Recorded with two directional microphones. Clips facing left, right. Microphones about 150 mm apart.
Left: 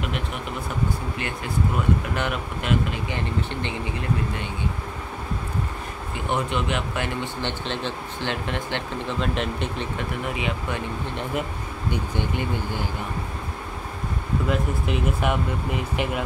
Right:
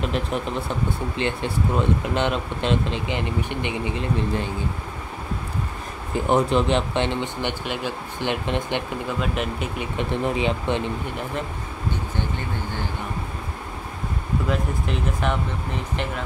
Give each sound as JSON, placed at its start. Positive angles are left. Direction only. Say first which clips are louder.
{"t": 0.0, "sound": "speech", "louder": "right 5 dB", "side_deg": -35}
{"t": 6.1, "sound": "speech", "louder": "right 7 dB", "side_deg": -35}
{"t": 9.2, "sound": "speech", "louder": "left 2 dB", "side_deg": -5}
{"t": 10.2, "sound": "speech", "louder": "right 7 dB", "side_deg": -30}
{"t": 11.9, "sound": "speech", "louder": "left 2 dB", "side_deg": 15}
{"t": 14.5, "sound": "speech", "louder": "left 1 dB", "side_deg": 5}